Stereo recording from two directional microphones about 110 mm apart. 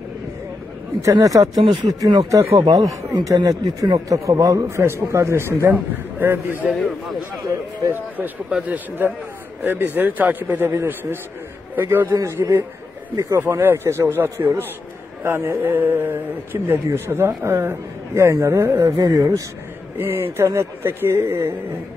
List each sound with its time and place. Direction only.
1.1 s speech: 30° right (ahead or behind)
7.9 s a man's voice: 10° right (ahead or behind); by 19.4 s 30° right (ahead or behind)
20.0 s speech: 20° right (ahead or behind)